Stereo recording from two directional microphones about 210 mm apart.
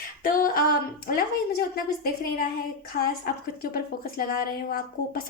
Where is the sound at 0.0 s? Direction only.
45° left (ahead or behind).